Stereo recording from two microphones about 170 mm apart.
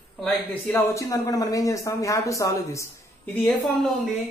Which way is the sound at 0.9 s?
20° left (ahead or behind).